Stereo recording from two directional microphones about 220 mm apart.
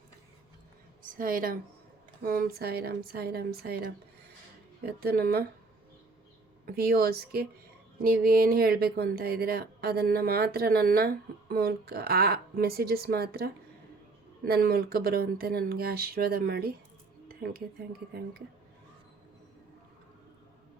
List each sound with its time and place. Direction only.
1.0 s speech: 40° right (ahead or behind)
6.7 s speech: 45° right (ahead or behind)